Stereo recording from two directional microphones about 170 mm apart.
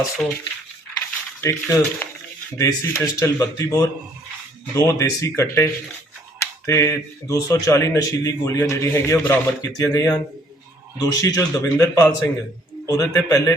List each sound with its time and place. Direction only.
1.4 s a man's voice: 15° left (ahead or behind)